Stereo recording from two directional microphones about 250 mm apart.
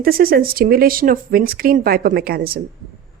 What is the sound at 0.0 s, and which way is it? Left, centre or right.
Speech, right.